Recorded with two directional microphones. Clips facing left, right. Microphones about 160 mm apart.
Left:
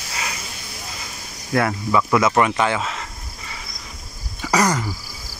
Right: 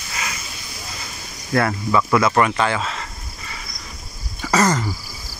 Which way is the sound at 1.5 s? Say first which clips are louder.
Right 1 dB; 10° left (ahead or behind).